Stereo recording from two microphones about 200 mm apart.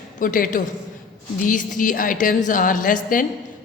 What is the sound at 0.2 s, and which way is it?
A woman's voice, 45° left (ahead or behind).